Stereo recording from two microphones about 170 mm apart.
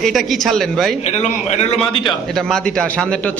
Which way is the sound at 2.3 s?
Centre (ahead or behind).